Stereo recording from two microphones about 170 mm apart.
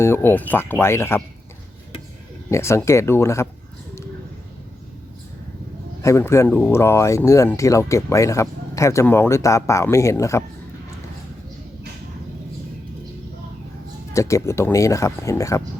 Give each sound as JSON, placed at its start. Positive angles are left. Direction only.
{"t": 0.0, "sound": "speech", "side_deg": 15}
{"t": 2.5, "sound": "speech", "side_deg": 15}
{"t": 6.0, "sound": "speech", "side_deg": 15}
{"t": 14.1, "sound": "speech", "side_deg": 20}